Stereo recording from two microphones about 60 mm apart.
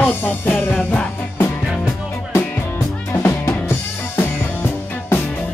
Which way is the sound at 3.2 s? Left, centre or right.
Left.